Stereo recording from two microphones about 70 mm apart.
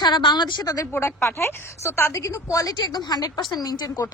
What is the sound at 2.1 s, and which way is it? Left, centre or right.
Speech, left.